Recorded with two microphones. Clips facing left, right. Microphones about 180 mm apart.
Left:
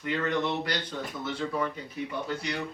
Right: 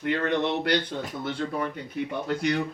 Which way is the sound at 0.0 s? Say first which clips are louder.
Right 3 dB; 65° right (ahead or behind).